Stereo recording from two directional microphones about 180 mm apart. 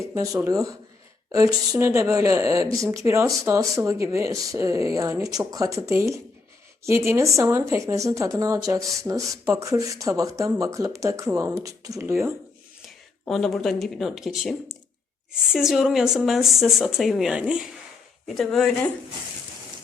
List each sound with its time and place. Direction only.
0.1 s speech: 15° right (ahead or behind)
13.2 s speech: centre (ahead or behind)